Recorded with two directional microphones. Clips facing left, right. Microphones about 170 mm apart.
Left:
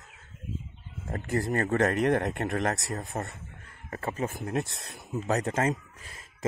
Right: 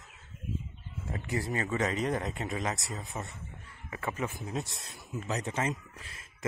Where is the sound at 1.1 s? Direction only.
45° left (ahead or behind).